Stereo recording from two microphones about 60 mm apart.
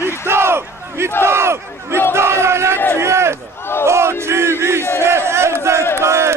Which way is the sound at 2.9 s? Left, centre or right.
Right.